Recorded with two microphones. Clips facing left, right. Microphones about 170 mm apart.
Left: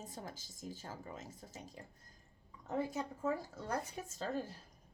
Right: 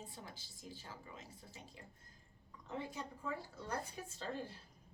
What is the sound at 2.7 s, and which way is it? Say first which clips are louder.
A woman's voice: left 7 dB; 45° left (ahead or behind).